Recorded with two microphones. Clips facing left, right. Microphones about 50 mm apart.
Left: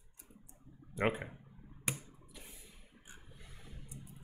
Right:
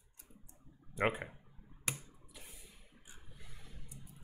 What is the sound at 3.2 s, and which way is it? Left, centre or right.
Vehicle, centre.